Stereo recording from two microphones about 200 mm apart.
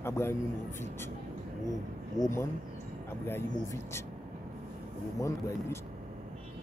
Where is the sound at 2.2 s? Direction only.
15° left (ahead or behind).